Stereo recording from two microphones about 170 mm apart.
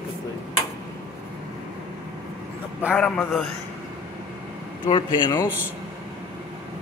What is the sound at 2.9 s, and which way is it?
Speech, 10° left (ahead or behind).